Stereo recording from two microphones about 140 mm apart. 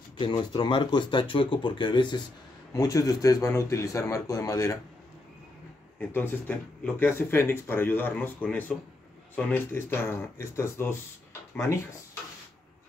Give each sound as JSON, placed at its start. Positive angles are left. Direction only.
{"t": 0.2, "sound": "speech", "side_deg": 35}
{"t": 5.9, "sound": "speech", "side_deg": 10}